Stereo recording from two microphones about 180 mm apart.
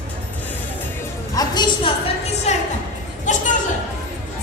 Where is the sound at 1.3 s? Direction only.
25° left (ahead or behind).